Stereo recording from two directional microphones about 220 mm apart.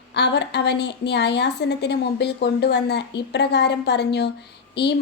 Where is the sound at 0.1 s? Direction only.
50° left (ahead or behind).